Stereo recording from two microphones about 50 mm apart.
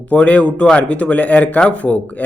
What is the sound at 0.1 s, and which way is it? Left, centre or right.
A man's voice, left.